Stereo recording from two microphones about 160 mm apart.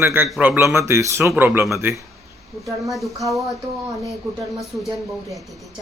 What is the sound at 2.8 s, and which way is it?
Speech, centre (ahead or behind).